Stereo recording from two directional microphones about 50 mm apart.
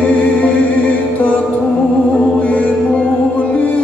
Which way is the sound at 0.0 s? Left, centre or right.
Left.